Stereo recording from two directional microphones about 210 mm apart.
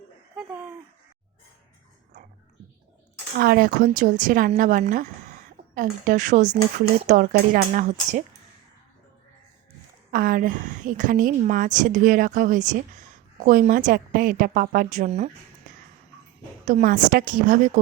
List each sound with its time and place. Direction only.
3.3 s a woman's voice: 45° right (ahead or behind)
10.1 s a woman's voice: 40° right (ahead or behind)
16.6 s a woman's voice: 40° right (ahead or behind)